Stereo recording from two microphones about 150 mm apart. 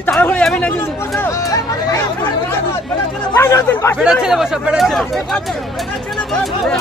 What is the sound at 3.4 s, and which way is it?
Speech, 15° left (ahead or behind).